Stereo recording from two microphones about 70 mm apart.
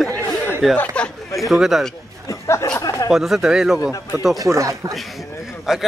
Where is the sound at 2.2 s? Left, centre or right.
Left.